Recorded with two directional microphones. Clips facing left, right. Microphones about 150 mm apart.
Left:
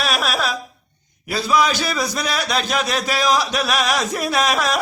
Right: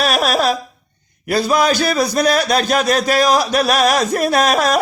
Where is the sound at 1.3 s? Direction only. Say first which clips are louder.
Right 4 dB; 50° right (ahead or behind).